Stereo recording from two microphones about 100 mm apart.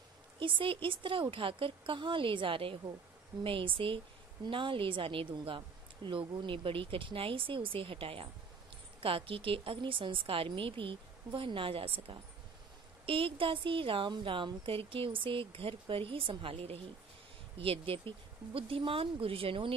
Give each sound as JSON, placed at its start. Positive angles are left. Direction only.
{"t": 0.4, "sound": "a woman's voice", "side_deg": -60}